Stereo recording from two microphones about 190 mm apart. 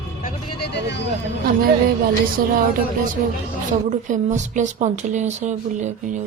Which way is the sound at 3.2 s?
50° right (ahead or behind).